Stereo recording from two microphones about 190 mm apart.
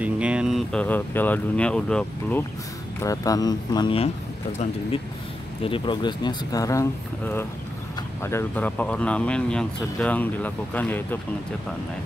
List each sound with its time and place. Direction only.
0.0 s speech: 5° right (ahead or behind)
3.0 s speech: 20° left (ahead or behind)
5.6 s speech: 25° left (ahead or behind); by 11.1 s 10° left (ahead or behind)